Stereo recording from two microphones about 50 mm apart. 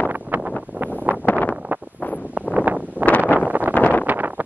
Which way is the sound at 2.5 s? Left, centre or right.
Right.